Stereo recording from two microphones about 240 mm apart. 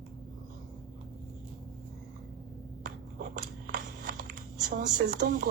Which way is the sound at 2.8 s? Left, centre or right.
Right.